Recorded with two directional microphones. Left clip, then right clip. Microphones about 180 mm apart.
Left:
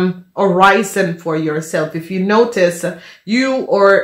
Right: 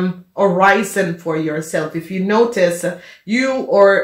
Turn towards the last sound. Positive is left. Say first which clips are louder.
# even
turn(degrees=30)  # may be behind; listen again after turning